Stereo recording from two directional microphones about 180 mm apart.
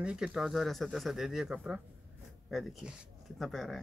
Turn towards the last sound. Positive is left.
turn(degrees=0)  # may be behind; listen again after turning